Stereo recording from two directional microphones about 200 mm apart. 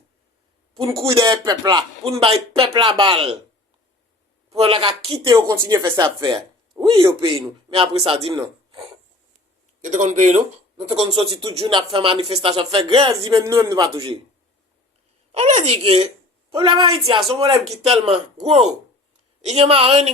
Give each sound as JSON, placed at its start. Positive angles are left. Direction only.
{"t": 0.9, "sound": "speech", "side_deg": -15}
{"t": 4.5, "sound": "speech", "side_deg": -30}
{"t": 5.3, "sound": "a woman's voice", "side_deg": -15}
{"t": 9.8, "sound": "speech", "side_deg": -35}
{"t": 15.3, "sound": "a woman's voice", "side_deg": -30}